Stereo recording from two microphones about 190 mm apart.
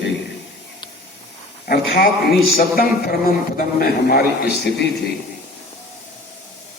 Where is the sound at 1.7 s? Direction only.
55° left (ahead or behind).